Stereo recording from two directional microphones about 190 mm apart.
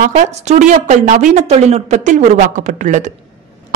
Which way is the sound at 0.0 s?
35° right (ahead or behind).